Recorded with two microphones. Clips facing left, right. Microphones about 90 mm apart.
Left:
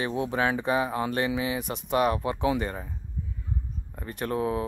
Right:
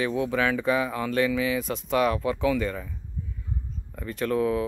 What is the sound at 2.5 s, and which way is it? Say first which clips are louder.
Speech: right 2 dB; 35° left (ahead or behind).